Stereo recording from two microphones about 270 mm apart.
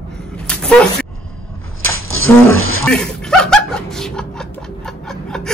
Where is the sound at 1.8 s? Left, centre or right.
Right.